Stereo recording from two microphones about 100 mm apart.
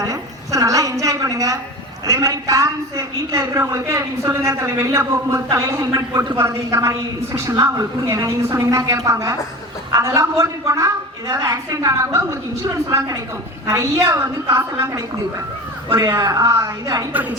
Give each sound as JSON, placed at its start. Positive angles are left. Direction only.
{"t": 0.0, "sound": "a woman's voice", "side_deg": -35}
{"t": 15.9, "sound": "a woman's voice", "side_deg": -30}
{"t": 17.1, "sound": "a woman's voice", "side_deg": -15}